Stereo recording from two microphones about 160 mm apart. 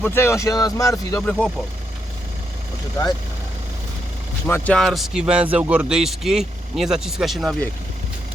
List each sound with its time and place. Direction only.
0.0 s speech: 15° left (ahead or behind)
1.2 s speech: 5° left (ahead or behind)
4.4 s speech: 10° left (ahead or behind)